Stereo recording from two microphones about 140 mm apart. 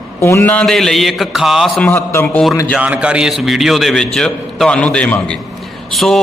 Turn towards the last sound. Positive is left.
turn(degrees=0)  # may be behind; listen again after turning